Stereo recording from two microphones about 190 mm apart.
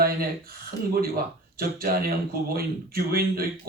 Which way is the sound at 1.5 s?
50° right (ahead or behind).